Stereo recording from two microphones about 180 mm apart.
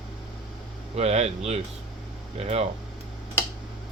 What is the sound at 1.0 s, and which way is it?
Speech, 35° right (ahead or behind).